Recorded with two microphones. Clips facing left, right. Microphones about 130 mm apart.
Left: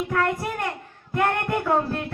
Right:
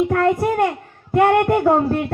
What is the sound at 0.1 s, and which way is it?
A child's voice, 45° right (ahead or behind).